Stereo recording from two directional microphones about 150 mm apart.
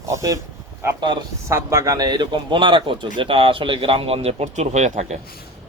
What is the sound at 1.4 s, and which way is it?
A man's voice, 20° right (ahead or behind).